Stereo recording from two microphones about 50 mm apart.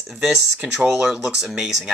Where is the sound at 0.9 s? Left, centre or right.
Centre.